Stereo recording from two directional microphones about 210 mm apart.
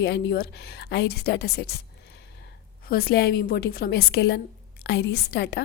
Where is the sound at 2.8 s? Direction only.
50° left (ahead or behind).